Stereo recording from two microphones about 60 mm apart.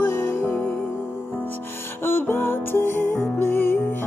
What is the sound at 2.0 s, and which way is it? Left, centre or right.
Music, left.